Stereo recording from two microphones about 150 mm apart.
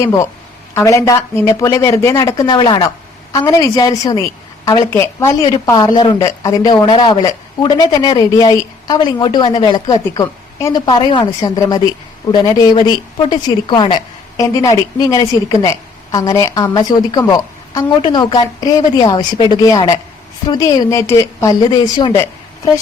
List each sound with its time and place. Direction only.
0.0 s speech: 20° left (ahead or behind)